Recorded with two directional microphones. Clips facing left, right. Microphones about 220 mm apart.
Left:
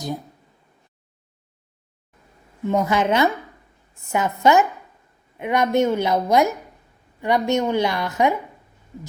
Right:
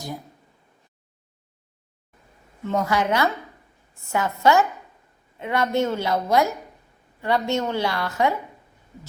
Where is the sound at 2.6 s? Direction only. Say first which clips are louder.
Left 3 dB; 20° left (ahead or behind).